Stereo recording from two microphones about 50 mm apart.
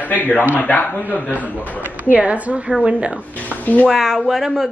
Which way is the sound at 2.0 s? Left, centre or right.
Right.